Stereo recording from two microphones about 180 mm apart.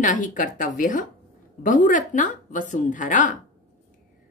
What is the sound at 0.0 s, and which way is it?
A woman's voice, 45° left (ahead or behind).